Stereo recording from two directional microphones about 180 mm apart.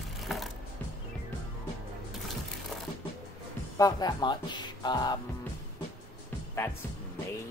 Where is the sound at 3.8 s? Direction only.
20° left (ahead or behind).